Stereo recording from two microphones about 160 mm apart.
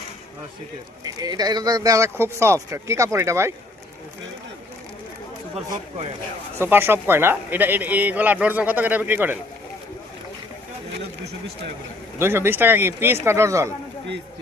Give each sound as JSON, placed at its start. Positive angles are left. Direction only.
{"t": 1.0, "sound": "speech", "side_deg": -25}
{"t": 6.6, "sound": "speech", "side_deg": -15}
{"t": 12.2, "sound": "speech", "side_deg": -15}